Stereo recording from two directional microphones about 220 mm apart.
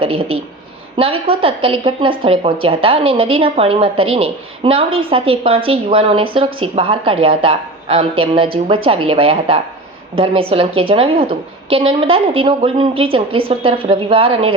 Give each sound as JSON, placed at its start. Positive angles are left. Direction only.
{"t": 0.0, "sound": "speech", "side_deg": -25}